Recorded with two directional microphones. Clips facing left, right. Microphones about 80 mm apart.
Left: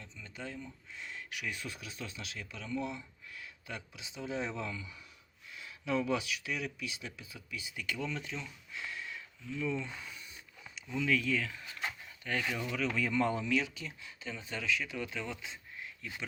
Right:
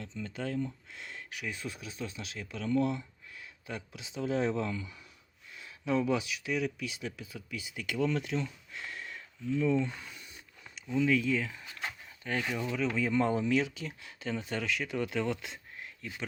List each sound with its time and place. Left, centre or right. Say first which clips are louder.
0.0 s speech: right 8 dB; right
2.1 s speech: right 4 dB; right
3.3 s a sound: right 3 dB; right
3.9 s speech: right 7 dB; right
10.9 s speech: right 4 dB; right